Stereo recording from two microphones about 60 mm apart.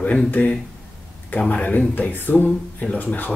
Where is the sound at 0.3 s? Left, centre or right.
Left.